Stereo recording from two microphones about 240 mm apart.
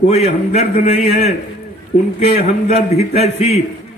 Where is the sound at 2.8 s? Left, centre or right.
Left.